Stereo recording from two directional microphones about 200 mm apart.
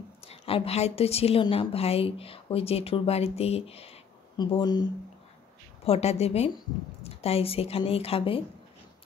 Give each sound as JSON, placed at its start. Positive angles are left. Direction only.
{"t": 0.3, "sound": "a woman's voice", "side_deg": 30}
{"t": 5.9, "sound": "a woman's voice", "side_deg": 30}